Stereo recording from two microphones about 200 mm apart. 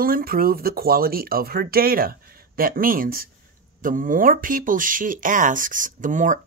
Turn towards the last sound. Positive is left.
turn(degrees=-40)  # may be behind; listen again after turning